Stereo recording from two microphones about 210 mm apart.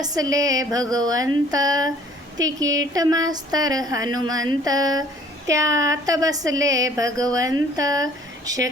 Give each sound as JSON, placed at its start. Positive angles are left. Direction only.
{"t": 0.0, "sound": "speech", "side_deg": -15}